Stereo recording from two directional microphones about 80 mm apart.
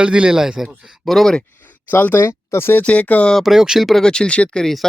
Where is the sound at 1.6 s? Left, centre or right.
Left.